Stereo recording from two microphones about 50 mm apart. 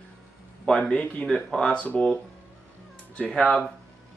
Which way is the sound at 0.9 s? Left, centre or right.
Left.